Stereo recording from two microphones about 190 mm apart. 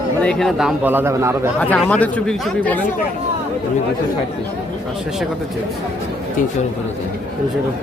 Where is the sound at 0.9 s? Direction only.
10° right (ahead or behind).